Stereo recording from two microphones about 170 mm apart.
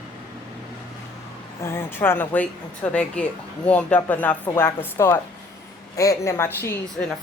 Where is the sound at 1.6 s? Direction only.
15° left (ahead or behind).